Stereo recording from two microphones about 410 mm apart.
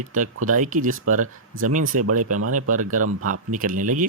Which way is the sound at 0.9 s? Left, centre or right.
Right.